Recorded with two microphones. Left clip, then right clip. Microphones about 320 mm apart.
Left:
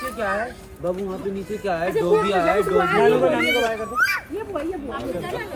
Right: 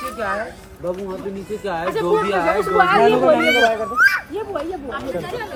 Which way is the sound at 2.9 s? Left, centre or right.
Right.